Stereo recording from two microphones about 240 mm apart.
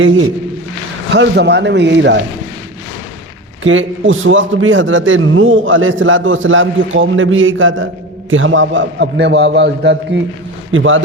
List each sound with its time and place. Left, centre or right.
1.1 s a man's voice: right
3.6 s a man's voice: right